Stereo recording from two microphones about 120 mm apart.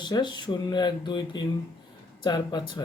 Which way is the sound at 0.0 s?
40° left (ahead or behind).